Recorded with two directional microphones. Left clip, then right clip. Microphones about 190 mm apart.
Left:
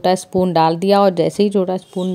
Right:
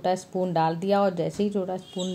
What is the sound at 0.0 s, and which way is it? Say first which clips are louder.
Speech: left 10 dB; 55° left (ahead or behind).